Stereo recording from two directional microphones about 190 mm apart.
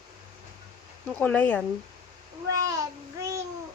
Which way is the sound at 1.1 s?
10° left (ahead or behind).